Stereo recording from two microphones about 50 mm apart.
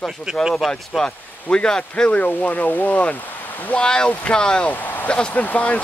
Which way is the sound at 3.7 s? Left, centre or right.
Centre.